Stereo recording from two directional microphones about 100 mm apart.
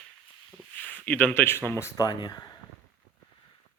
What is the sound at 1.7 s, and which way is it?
Speech, 25° left (ahead or behind).